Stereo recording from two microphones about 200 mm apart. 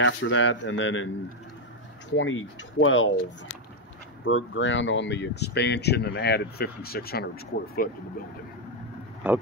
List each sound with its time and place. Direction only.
0.0 s a man's voice: 70° left (ahead or behind)
2.1 s speech: 75° left (ahead or behind)
4.2 s speech: 70° left (ahead or behind); by 7.9 s 50° left (ahead or behind)
9.2 s speech: 5° right (ahead or behind)